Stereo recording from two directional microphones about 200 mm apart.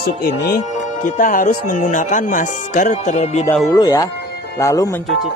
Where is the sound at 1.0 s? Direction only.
40° left (ahead or behind).